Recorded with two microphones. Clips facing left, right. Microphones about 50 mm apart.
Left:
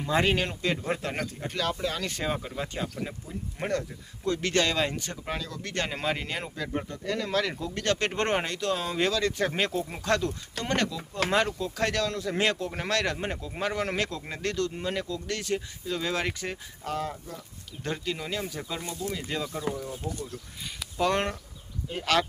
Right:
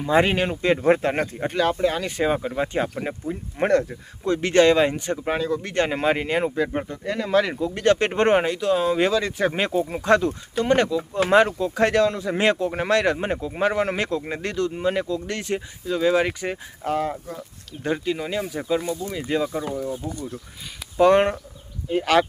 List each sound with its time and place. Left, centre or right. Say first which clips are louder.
0.1 s speech: right 6 dB; right
0.8 s speech: right 11 dB; right; by 2.5 s centre
2.6 s speech: right 8 dB; right
4.2 s speech: right 9 dB; right
15.9 s speech: right 9 dB; centre
16.8 s speech: right 8 dB; right
17.8 s speech: right 7 dB; centre
21.0 s speech: right 10 dB; right